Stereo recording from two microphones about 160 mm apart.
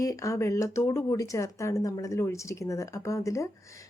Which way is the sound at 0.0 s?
20° left (ahead or behind).